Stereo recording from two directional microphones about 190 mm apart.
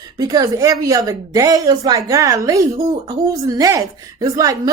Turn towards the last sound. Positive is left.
turn(degrees=-20)  # may be behind; listen again after turning